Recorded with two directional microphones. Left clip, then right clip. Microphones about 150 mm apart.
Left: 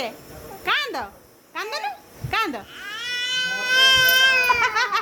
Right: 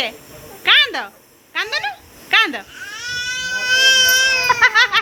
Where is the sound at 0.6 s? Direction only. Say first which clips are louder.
Right 10 dB; centre (ahead or behind).